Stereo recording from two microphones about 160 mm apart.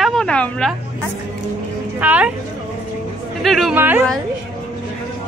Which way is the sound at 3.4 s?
Centre (ahead or behind).